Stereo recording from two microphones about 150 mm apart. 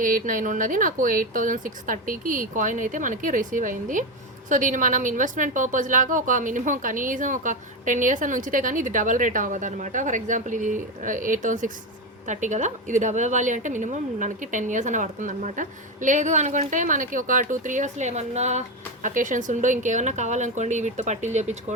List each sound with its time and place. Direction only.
0.0 s a woman's voice: 60° right (ahead or behind)
19.0 s a woman's voice: 60° right (ahead or behind)